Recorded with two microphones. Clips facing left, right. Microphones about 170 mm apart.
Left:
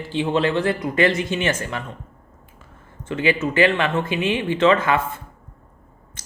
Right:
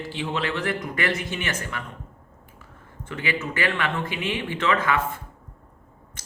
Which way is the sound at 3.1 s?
25° left (ahead or behind).